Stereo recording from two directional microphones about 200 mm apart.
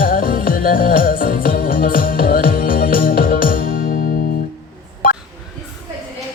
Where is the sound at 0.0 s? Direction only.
45° left (ahead or behind).